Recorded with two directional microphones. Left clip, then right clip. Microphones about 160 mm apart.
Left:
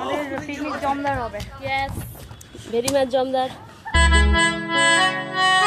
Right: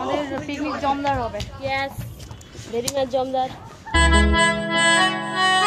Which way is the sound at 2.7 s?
50° left (ahead or behind).